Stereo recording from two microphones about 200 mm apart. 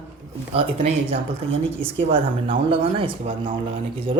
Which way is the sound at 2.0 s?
25° right (ahead or behind).